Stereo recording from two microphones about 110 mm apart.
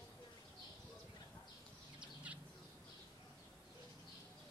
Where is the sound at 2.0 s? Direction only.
10° right (ahead or behind).